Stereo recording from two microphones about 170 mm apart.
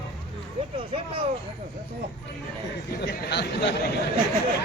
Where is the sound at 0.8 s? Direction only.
30° right (ahead or behind).